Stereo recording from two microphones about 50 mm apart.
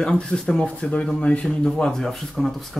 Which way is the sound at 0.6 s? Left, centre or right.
Left.